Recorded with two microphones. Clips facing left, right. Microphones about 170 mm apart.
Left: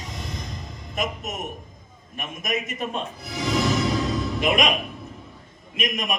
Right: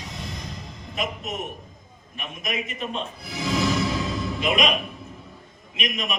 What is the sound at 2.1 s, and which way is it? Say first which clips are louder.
Speech: left 2 dB; 45° left (ahead or behind).